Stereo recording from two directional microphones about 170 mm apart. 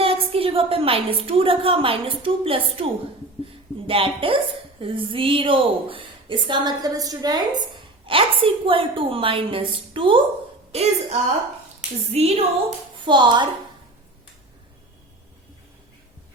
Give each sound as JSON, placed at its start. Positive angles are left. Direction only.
{"t": 0.0, "sound": "a woman's voice", "side_deg": -35}
{"t": 13.0, "sound": "a woman's voice", "side_deg": -30}